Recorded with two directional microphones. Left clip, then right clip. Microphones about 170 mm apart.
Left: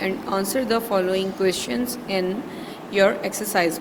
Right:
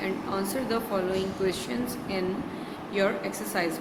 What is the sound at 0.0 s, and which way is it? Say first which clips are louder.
Speech: left 6 dB; 50° left (ahead or behind).